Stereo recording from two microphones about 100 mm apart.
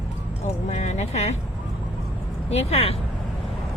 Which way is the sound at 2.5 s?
90° left.